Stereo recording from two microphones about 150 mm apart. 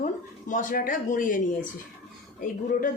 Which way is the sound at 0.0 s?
60° left (ahead or behind).